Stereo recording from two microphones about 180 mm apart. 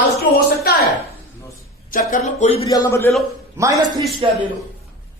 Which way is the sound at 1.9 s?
50° left (ahead or behind).